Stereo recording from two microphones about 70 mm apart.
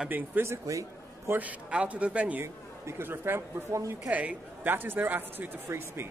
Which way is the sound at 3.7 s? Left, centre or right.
Right.